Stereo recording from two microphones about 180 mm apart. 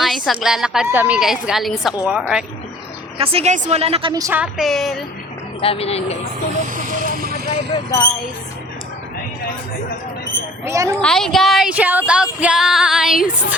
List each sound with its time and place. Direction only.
0.0 s a woman's voice: centre (ahead or behind)
0.9 s female singing: 10° right (ahead or behind)
3.2 s speech: 35° right (ahead or behind)
4.1 s a woman's voice: 20° right (ahead or behind)
4.4 s female singing: centre (ahead or behind)
5.5 s speech: 30° left (ahead or behind)
6.8 s vehicle: 45° right (ahead or behind)
7.7 s speech: 20° left (ahead or behind)
10.7 s speech: 15° right (ahead or behind)
11.0 s female singing: 5° left (ahead or behind)